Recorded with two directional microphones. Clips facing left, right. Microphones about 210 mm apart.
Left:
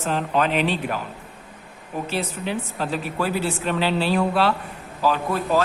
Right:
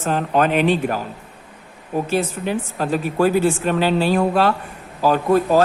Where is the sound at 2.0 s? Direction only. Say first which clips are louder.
Right 4 dB; 45° right (ahead or behind).